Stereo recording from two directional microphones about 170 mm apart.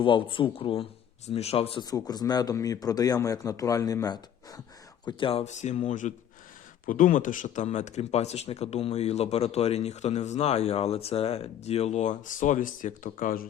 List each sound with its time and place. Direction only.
0.0 s a man's voice: 30° left (ahead or behind); by 13.4 s 50° left (ahead or behind)